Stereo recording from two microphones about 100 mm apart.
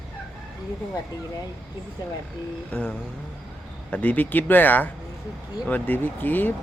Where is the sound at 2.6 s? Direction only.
10° left (ahead or behind).